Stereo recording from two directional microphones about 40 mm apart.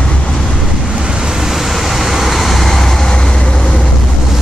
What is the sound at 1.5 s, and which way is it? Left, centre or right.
Vehicle, centre.